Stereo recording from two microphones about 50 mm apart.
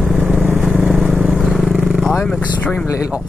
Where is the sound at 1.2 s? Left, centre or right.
Centre.